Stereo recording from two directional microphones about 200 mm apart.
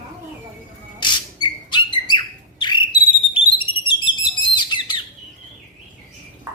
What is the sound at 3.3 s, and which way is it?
Smoke detector, 25° left (ahead or behind).